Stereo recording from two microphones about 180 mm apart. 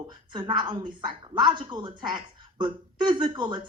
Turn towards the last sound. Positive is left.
turn(degrees=-25)  # may be behind; listen again after turning